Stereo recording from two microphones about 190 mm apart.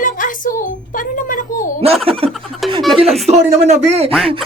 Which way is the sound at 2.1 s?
30° right (ahead or behind).